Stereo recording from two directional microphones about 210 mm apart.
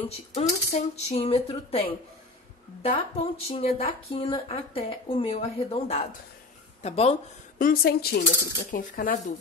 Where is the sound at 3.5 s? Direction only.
25° left (ahead or behind).